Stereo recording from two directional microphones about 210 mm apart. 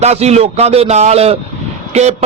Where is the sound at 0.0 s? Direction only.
30° right (ahead or behind).